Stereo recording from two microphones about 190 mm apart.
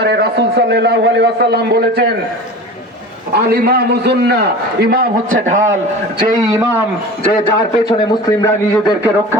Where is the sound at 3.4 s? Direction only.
55° right (ahead or behind).